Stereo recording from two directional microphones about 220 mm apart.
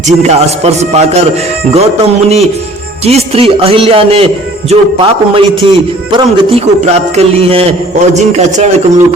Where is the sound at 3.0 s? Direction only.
30° right (ahead or behind).